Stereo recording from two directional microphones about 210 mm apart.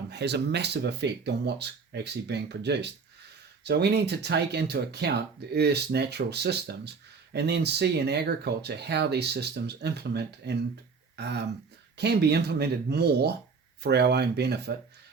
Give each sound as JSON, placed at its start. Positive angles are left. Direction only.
{"t": 0.1, "sound": "speech", "side_deg": -55}